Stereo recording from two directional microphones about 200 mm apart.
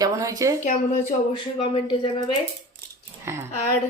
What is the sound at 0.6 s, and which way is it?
Speech, 40° left (ahead or behind).